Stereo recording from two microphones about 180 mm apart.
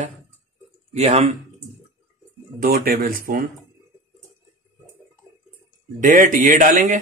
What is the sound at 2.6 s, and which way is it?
Speech, 55° right (ahead or behind).